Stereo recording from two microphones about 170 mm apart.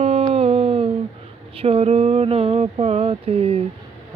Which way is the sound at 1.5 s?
35° right (ahead or behind).